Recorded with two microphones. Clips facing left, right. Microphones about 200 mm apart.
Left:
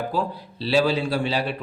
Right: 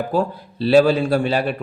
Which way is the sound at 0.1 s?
50° right (ahead or behind).